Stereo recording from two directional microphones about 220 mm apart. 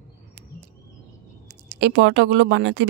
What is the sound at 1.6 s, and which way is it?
Speech, 50° right (ahead or behind).